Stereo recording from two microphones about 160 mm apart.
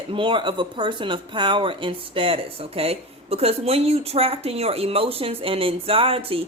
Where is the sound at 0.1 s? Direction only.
30° right (ahead or behind).